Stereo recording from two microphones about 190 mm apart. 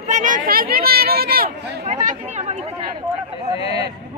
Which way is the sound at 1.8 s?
40° right (ahead or behind).